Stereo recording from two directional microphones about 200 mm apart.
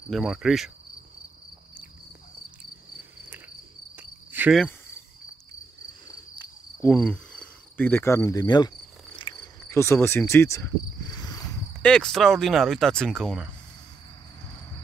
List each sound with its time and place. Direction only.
0.1 s speech: centre (ahead or behind)
3.9 s cricket: 10° right (ahead or behind)
4.6 s cricket: 10° left (ahead or behind)
6.0 s insect: 20° left (ahead or behind)
6.9 s cricket: 5° left (ahead or behind)
11.8 s speech: 5° left (ahead or behind)